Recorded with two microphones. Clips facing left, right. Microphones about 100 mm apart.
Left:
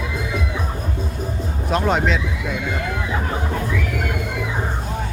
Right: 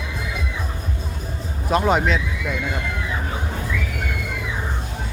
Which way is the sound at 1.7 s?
5° right (ahead or behind).